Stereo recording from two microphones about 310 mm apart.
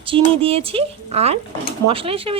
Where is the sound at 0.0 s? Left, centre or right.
Centre.